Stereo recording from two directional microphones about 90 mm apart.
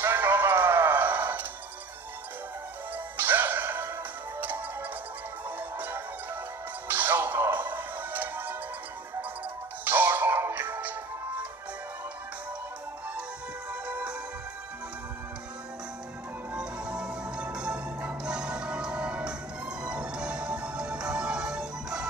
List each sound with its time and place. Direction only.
0.0 s music: 25° right (ahead or behind)
3.2 s music: 20° right (ahead or behind)
5.6 s music: 20° right (ahead or behind)
9.8 s music: 20° right (ahead or behind)
13.7 s music: 15° right (ahead or behind)
16.5 s music: 10° right (ahead or behind)